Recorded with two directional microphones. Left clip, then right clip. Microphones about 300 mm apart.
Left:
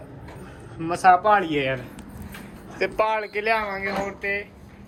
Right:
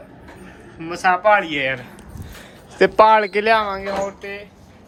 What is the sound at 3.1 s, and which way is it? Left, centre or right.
Speech, right.